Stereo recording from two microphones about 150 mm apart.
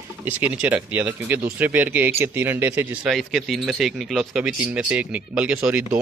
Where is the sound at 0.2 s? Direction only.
10° right (ahead or behind).